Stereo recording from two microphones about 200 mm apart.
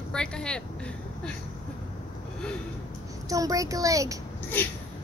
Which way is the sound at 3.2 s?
15° right (ahead or behind).